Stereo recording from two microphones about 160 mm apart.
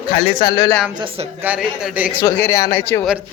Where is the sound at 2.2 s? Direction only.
15° left (ahead or behind).